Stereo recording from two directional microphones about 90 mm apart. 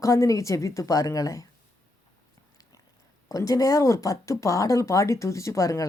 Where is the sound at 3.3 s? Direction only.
40° left (ahead or behind).